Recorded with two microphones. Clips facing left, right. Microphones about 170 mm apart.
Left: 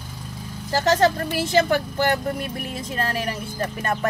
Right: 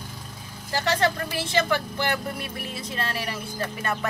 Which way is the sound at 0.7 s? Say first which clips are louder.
Left 5 dB; 45° left (ahead or behind).